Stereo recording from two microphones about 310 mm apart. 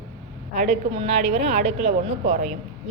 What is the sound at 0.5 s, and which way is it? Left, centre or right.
Speech, right.